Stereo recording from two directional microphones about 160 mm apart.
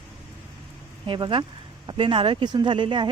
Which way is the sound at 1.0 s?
30° right (ahead or behind).